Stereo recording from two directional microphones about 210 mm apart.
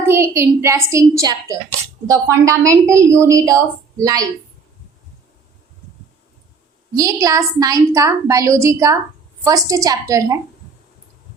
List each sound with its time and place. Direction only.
0.1 s a woman's voice: 10° right (ahead or behind)
6.9 s a woman's voice: 15° right (ahead or behind)